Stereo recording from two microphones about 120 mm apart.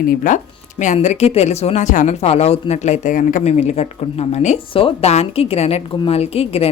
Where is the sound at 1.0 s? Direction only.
70° left (ahead or behind).